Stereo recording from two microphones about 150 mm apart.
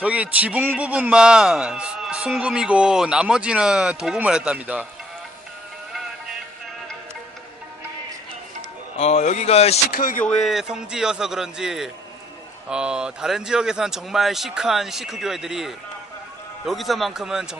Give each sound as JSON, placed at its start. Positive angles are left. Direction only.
{"t": 0.0, "sound": "a man's voice", "side_deg": -10}
{"t": 9.0, "sound": "speech", "side_deg": 50}
{"t": 9.9, "sound": "speech", "side_deg": 70}
{"t": 10.2, "sound": "speech", "side_deg": 0}